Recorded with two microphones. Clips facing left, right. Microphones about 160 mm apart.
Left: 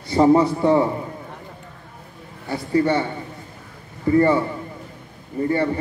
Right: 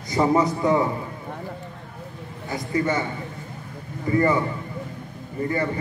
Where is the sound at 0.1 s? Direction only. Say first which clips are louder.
Left 5 dB; 30° left (ahead or behind).